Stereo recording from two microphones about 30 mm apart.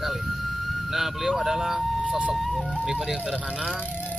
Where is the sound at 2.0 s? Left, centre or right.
Right.